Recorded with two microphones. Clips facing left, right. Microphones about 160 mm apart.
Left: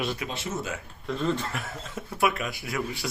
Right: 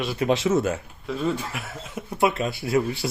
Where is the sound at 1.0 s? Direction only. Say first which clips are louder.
Right 1 dB; 5° right (ahead or behind).